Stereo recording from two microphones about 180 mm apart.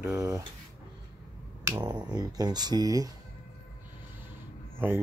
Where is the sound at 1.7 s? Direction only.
20° right (ahead or behind).